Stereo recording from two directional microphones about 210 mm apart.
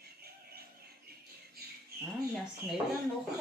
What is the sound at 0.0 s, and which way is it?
Music, 50° right (ahead or behind).